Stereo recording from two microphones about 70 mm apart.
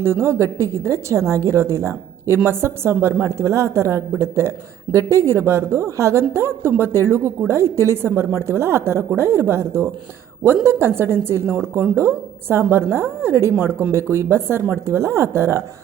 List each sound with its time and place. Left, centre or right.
0.0 s a woman's voice: right